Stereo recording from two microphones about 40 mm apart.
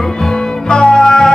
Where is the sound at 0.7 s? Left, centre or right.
Centre.